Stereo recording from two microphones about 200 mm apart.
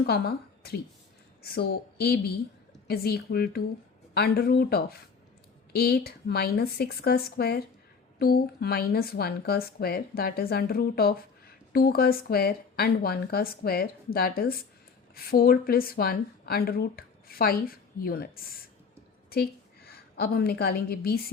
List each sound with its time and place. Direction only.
0.0 s a woman's voice: 50° left (ahead or behind)